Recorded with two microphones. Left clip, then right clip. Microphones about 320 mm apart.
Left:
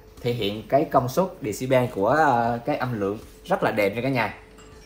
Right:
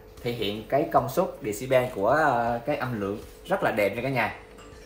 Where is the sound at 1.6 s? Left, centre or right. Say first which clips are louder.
Left 2 dB; centre.